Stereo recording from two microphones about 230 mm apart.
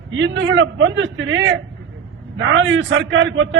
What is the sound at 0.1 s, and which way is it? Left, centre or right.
A man's voice, right.